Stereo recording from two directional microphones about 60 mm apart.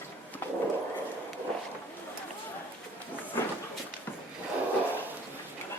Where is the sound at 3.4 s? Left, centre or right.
Left.